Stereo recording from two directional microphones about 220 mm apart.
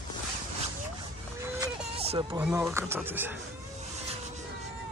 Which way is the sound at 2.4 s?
10° right (ahead or behind).